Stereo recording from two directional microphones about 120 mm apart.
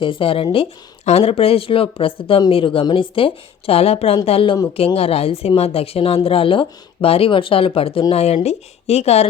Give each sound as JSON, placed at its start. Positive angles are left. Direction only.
{"t": 0.0, "sound": "a woman's voice", "side_deg": 45}
{"t": 1.0, "sound": "a woman's voice", "side_deg": 55}